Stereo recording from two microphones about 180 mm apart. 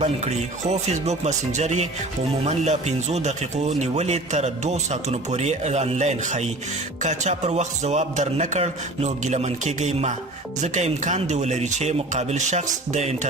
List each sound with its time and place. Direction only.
0.0 s speech: 40° right (ahead or behind)